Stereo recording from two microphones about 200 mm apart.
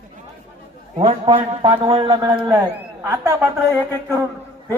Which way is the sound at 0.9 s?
30° right (ahead or behind).